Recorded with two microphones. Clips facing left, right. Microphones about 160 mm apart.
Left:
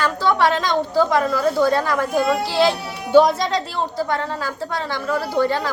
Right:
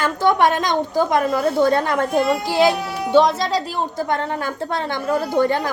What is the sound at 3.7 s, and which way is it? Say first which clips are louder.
A woman's voice: even; 20° right (ahead or behind).